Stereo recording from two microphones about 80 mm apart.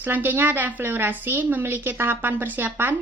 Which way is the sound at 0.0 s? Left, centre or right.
Right.